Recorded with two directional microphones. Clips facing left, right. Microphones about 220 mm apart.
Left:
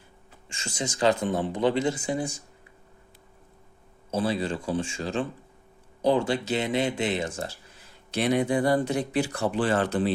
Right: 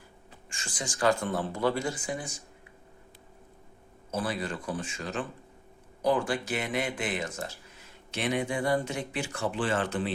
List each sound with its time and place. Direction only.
0.5 s speech: 25° left (ahead or behind)
4.1 s speech: 25° left (ahead or behind)